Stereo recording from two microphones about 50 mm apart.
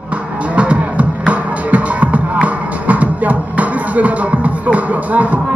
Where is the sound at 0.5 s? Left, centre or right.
Right.